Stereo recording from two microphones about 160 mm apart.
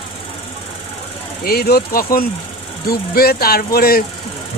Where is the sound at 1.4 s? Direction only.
75° left (ahead or behind).